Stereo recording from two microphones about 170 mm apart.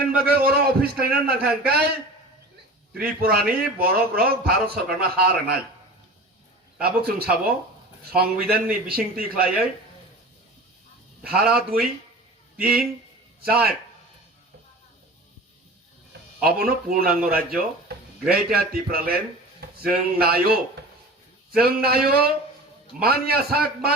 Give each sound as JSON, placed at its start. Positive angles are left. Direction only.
{"t": 0.3, "sound": "a man's voice", "side_deg": -65}
{"t": 2.9, "sound": "a man's voice", "side_deg": -60}
{"t": 6.7, "sound": "a man's voice", "side_deg": -65}
{"t": 11.3, "sound": "a man's voice", "side_deg": -65}
{"t": 16.4, "sound": "a man's voice", "side_deg": -65}